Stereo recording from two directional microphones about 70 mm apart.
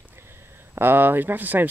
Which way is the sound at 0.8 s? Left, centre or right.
Right.